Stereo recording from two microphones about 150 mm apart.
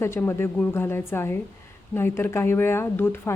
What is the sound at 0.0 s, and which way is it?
A woman's voice, 15° left (ahead or behind).